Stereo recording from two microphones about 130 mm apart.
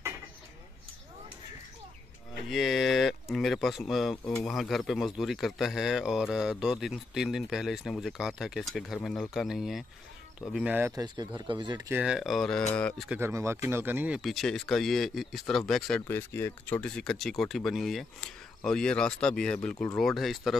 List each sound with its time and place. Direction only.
2.5 s speech: centre (ahead or behind)
10.9 s speech: 30° right (ahead or behind)
12.0 s speech: 5° right (ahead or behind)
13.1 s speech: 20° right (ahead or behind)
14.2 s speech: centre (ahead or behind)
16.1 s speech: 20° left (ahead or behind); by 20.5 s centre (ahead or behind)